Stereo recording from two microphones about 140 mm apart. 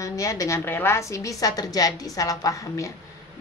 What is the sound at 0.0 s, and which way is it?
A woman's voice, 25° left (ahead or behind).